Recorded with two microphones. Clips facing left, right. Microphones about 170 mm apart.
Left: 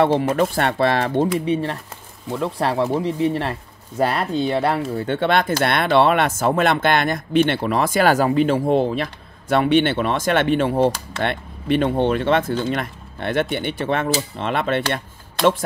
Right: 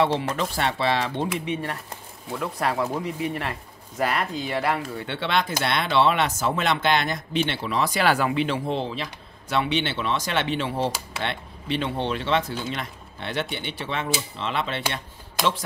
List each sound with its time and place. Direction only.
0.0 s speech: 50° left (ahead or behind); by 4.7 s 30° left (ahead or behind)
4.9 s speech: 45° left (ahead or behind)